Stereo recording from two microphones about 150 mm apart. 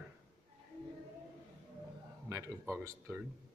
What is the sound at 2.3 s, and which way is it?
Speech, 20° right (ahead or behind).